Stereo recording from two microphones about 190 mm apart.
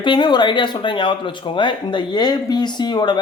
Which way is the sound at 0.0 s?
25° left (ahead or behind).